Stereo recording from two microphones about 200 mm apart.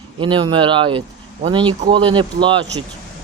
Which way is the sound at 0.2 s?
25° right (ahead or behind).